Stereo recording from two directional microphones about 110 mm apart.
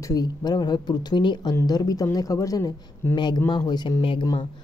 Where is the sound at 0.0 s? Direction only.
35° left (ahead or behind).